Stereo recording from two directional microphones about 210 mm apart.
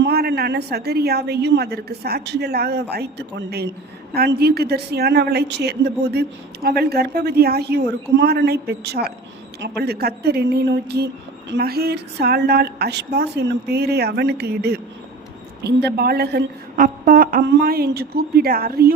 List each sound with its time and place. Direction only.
0.0 s a woman's voice: 50° right (ahead or behind)